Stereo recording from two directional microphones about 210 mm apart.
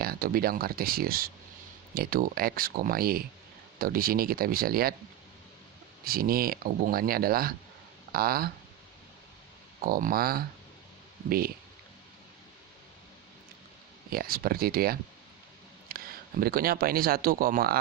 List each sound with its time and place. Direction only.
0.0 s speech: 45° right (ahead or behind)
6.1 s speech: 45° right (ahead or behind)
9.8 s speech: 45° right (ahead or behind)
14.1 s speech: 45° right (ahead or behind)
15.9 s a sound: 45° right (ahead or behind)
16.4 s speech: 45° right (ahead or behind)